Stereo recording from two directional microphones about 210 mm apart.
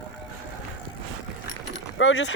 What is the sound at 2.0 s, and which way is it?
Speech, 70° left (ahead or behind).